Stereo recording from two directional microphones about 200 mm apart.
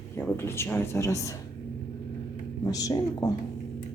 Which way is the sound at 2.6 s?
20° left (ahead or behind).